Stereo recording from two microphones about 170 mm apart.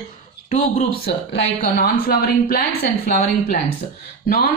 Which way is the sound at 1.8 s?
65° left (ahead or behind).